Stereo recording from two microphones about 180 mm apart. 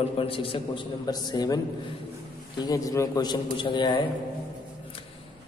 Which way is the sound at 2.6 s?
20° left (ahead or behind).